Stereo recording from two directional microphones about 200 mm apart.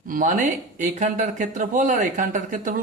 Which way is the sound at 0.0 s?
40° right (ahead or behind).